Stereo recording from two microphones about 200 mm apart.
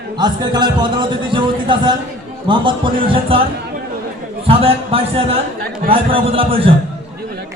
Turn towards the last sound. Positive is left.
turn(degrees=-30)  # may be behind; listen again after turning